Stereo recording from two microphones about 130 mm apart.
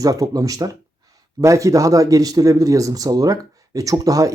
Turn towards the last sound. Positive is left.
turn(degrees=-25)  # may be behind; listen again after turning